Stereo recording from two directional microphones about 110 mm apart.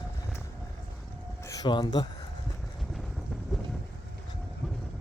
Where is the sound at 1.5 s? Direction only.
40° left (ahead or behind).